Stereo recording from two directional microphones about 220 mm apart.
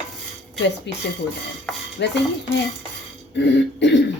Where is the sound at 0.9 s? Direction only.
50° left (ahead or behind).